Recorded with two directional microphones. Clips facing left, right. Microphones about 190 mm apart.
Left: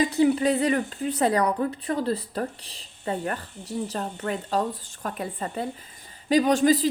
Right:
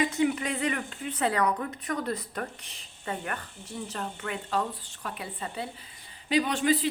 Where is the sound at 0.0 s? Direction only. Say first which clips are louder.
Left 6 dB; 35° left (ahead or behind).